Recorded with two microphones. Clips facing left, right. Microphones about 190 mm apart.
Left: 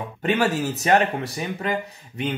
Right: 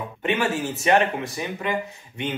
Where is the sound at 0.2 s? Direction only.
40° left (ahead or behind).